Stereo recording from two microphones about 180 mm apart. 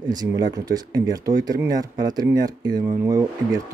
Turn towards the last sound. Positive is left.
turn(degrees=-20)  # may be behind; listen again after turning